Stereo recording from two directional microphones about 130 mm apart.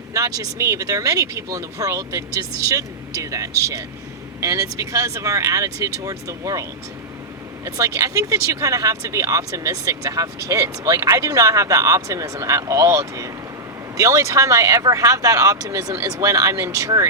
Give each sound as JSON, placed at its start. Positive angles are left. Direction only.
{"t": 0.1, "sound": "speech", "side_deg": -25}